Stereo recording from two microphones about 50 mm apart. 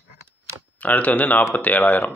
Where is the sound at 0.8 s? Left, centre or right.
Left.